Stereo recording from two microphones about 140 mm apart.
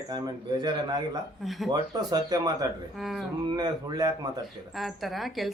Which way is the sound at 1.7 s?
30° right (ahead or behind).